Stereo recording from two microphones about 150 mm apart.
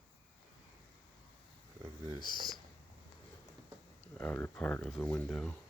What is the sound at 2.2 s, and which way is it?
Speech, 30° left (ahead or behind).